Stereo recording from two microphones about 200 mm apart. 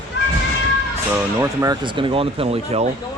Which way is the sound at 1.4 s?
15° right (ahead or behind).